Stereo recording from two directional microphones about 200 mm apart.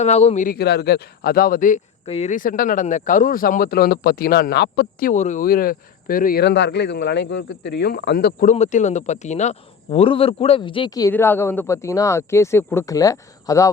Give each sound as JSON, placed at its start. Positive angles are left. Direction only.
{"t": 0.0, "sound": "speech", "side_deg": 35}